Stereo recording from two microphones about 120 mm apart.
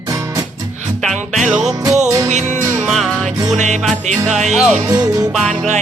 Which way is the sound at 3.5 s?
80° right.